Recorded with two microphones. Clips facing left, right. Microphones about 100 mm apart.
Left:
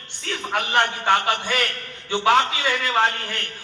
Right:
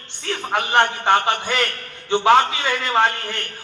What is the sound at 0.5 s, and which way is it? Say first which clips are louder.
A man's voice: right 3 dB; 25° right (ahead or behind).